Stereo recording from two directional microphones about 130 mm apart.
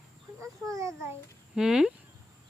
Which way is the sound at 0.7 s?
25° right (ahead or behind).